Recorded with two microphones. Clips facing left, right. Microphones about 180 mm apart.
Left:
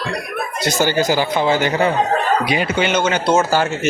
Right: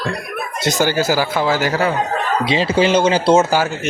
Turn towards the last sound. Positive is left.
turn(degrees=0)  # may be behind; listen again after turning